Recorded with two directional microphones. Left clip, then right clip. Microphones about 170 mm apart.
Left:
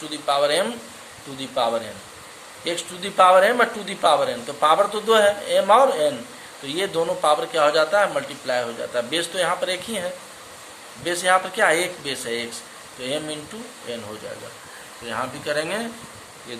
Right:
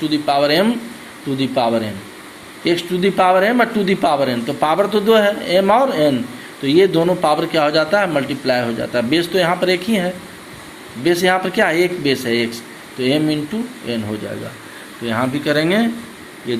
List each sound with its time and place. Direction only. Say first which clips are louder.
0.0 s speech: right 5 dB; 15° right (ahead or behind)